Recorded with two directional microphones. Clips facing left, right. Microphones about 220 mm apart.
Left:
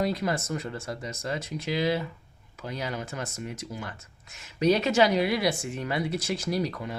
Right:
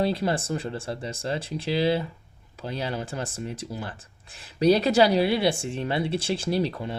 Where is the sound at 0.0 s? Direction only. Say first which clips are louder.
Right 3 dB; 30° right (ahead or behind).